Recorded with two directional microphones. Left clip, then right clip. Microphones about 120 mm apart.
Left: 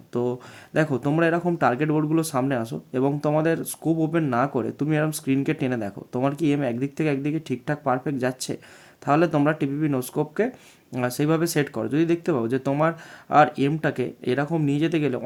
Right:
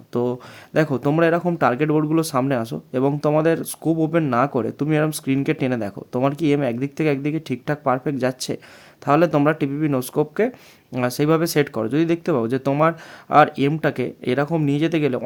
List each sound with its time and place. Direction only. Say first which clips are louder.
0.1 s speech: right 3 dB; 35° right (ahead or behind)